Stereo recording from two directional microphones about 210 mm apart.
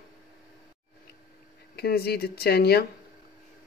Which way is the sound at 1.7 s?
50° left (ahead or behind).